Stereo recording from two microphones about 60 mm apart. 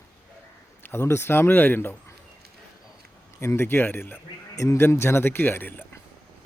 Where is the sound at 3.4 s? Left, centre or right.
Left.